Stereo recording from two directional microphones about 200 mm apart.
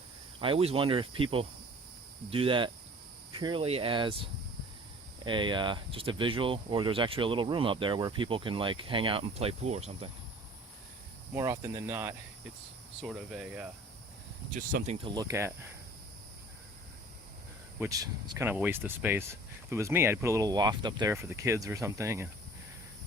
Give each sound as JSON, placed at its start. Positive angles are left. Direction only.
{"t": 0.3, "sound": "speech", "side_deg": -25}
{"t": 11.3, "sound": "speech", "side_deg": -15}
{"t": 14.7, "sound": "speech", "side_deg": -45}
{"t": 15.0, "sound": "speech", "side_deg": -20}
{"t": 17.7, "sound": "speech", "side_deg": -15}